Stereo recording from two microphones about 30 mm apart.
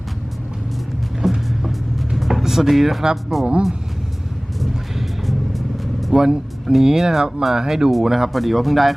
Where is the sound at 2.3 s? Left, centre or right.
Centre.